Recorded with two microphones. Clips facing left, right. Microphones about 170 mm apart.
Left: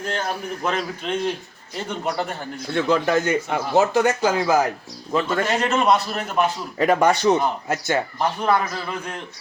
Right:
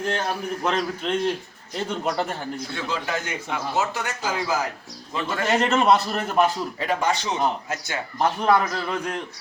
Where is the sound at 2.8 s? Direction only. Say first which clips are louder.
Left 10 dB; 60° left (ahead or behind).